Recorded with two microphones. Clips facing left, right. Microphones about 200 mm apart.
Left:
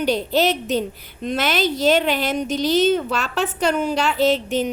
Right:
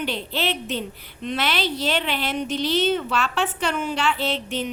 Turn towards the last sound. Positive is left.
turn(degrees=45)  # may be behind; listen again after turning